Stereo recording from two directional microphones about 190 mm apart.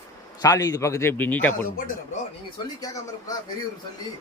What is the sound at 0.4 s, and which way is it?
A man's voice, 20° left (ahead or behind).